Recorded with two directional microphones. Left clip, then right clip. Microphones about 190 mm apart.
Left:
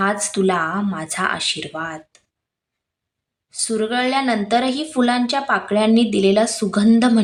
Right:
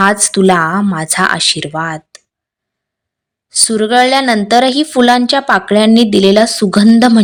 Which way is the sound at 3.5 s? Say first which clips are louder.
Right 10 dB; 40° right (ahead or behind).